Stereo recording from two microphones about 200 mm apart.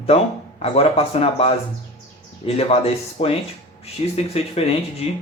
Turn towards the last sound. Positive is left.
turn(degrees=30)  # may be behind; listen again after turning